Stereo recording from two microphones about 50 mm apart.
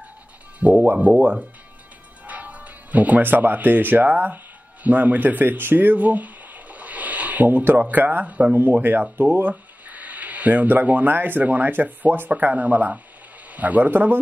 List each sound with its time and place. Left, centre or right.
0.6 s speech: right
2.2 s speech: right